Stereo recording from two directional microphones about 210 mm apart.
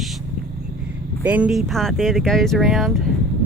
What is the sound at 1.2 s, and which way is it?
Speech, 5° right (ahead or behind).